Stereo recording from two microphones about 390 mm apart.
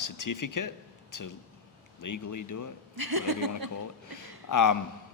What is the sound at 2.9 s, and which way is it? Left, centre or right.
Speech, right.